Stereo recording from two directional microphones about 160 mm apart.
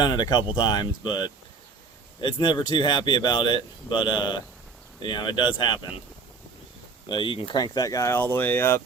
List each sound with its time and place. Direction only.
0.0 s speech: 25° left (ahead or behind)
7.1 s speech: 30° left (ahead or behind); by 8.8 s 15° left (ahead or behind)